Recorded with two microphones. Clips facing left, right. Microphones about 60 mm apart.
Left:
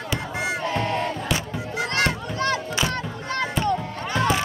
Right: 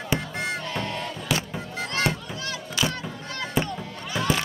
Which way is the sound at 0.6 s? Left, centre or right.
Left.